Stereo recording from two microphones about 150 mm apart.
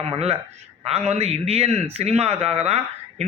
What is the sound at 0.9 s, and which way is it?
A man's voice, 45° right (ahead or behind).